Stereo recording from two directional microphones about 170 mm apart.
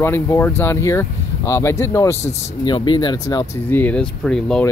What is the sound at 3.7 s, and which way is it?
Speech, 10° left (ahead or behind).